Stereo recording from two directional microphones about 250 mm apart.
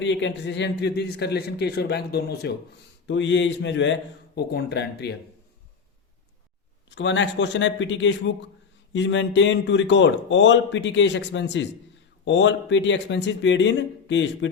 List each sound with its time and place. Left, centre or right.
0.0 s a man's voice: left
6.9 s speech: left